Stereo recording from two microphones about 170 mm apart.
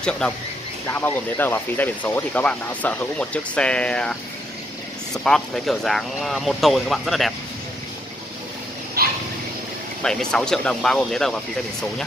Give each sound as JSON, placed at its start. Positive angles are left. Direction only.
{"t": 0.8, "sound": "speech", "side_deg": 10}
{"t": 9.0, "sound": "a sound", "side_deg": -65}
{"t": 10.0, "sound": "speech", "side_deg": 5}